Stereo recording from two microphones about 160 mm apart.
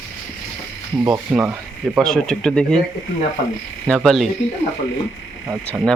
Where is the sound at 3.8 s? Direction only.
Centre (ahead or behind).